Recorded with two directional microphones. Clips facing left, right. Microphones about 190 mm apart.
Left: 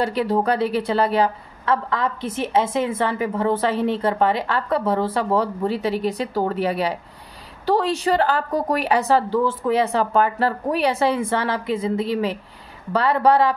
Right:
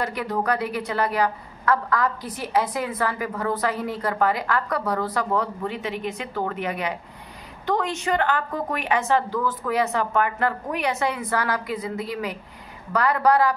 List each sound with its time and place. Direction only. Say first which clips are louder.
0.0 s a woman's voice: left 5 dB; 30° left (ahead or behind)